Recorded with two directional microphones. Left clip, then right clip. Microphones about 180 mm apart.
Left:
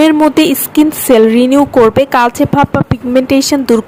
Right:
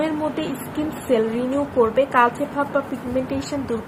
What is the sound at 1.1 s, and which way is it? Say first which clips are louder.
A woman's voice: left 13 dB; 65° left (ahead or behind).